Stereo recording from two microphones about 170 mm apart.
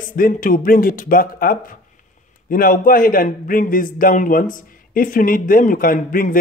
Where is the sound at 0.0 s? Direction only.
50° left (ahead or behind).